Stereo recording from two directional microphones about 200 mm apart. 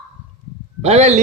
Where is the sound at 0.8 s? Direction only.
30° right (ahead or behind).